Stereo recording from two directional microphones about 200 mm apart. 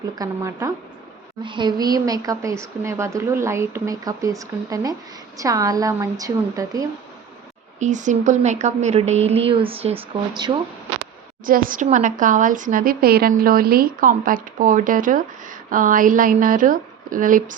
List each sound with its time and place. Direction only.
0.2 s speech: 15° right (ahead or behind)
7.8 s a woman's voice: 40° right (ahead or behind); by 10.6 s 20° right (ahead or behind)
11.4 s a woman's voice: 45° right (ahead or behind)